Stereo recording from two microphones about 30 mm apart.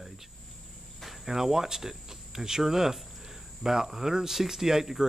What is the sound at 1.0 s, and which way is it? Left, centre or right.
Speech, centre.